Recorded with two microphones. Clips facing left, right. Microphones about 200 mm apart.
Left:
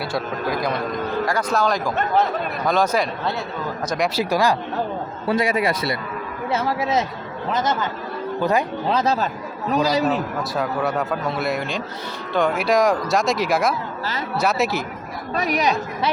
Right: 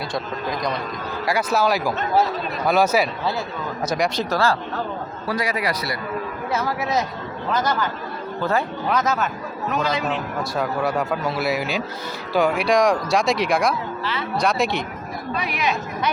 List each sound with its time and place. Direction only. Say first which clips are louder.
1.2 s speech: right 2 dB; 10° right (ahead or behind); by 4.5 s 15° left (ahead or behind)
5.2 s a man's voice: left 4 dB; 25° left (ahead or behind)
8.9 s a man's voice: left 1 dB; 30° left (ahead or behind)
10.1 s speech: left 3 dB; centre (ahead or behind)
14.0 s speech: even; 40° left (ahead or behind)
14.3 s speech: even; 5° left (ahead or behind)
15.4 s a man's voice: left 5 dB; 40° left (ahead or behind)